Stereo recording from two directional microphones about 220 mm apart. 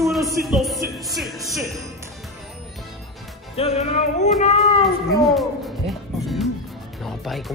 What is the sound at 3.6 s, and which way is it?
Music, 30° left (ahead or behind).